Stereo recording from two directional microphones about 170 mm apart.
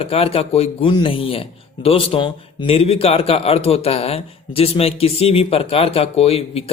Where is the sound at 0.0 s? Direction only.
35° left (ahead or behind).